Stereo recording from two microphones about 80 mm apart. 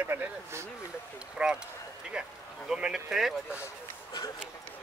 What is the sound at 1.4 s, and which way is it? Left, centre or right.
Speech, centre.